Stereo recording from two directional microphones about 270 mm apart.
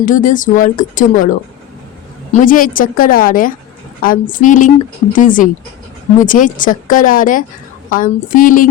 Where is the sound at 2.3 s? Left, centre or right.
Left.